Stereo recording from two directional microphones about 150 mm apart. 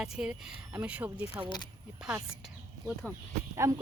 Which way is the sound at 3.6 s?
20° right (ahead or behind).